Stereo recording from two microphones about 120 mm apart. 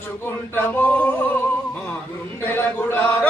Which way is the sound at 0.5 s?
15° left (ahead or behind).